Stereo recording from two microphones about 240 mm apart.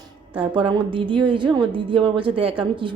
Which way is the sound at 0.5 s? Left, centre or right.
Centre.